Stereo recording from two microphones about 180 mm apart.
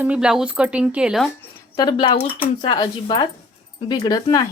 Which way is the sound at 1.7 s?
25° left (ahead or behind).